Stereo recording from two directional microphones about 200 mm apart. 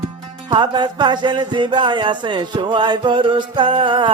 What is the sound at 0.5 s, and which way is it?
Music, 20° right (ahead or behind).